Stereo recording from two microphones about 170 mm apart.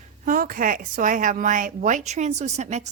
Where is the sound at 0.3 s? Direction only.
55° right (ahead or behind).